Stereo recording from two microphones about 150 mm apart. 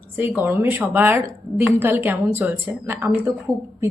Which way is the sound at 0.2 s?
15° right (ahead or behind).